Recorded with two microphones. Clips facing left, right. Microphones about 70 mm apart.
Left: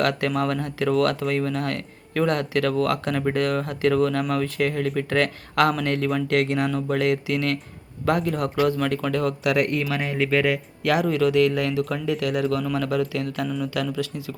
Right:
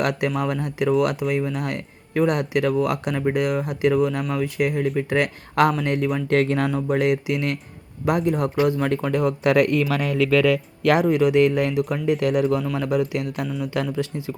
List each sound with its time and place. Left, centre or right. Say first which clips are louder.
0.0 s speech: even; centre
6.2 s speech: right 4 dB; right
6.7 s speech: right 2 dB; right
9.9 s speech: right 3 dB; right
10.3 s speech: right 4 dB; right
11.0 s speech: even; centre